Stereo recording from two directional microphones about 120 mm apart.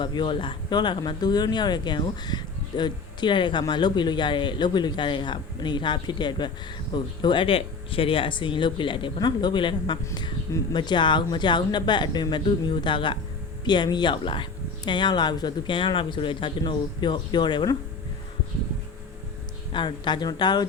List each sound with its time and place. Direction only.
0.0 s speech: 40° left (ahead or behind)
19.7 s speech: 40° left (ahead or behind)